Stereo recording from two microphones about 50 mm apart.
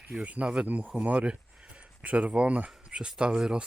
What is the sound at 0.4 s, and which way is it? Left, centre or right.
Speech, centre.